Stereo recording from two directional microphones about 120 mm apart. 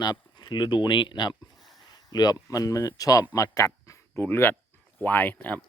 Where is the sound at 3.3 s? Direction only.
25° left (ahead or behind).